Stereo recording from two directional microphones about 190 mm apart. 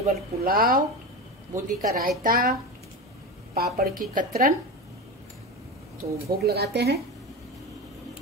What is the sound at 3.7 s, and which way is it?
Speech, 50° right (ahead or behind).